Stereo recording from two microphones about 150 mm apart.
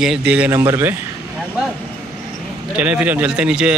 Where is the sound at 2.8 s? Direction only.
10° right (ahead or behind).